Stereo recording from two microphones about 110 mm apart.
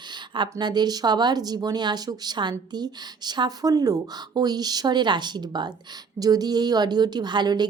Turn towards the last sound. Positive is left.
turn(degrees=-40)  # may be behind; listen again after turning